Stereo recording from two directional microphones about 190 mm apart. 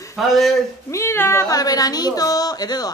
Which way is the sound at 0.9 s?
15° left (ahead or behind).